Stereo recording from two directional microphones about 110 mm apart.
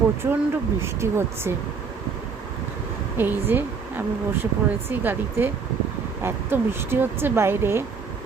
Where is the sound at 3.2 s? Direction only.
20° right (ahead or behind).